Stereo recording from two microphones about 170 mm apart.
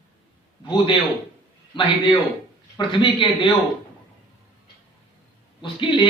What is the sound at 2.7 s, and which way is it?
Speech, 30° left (ahead or behind).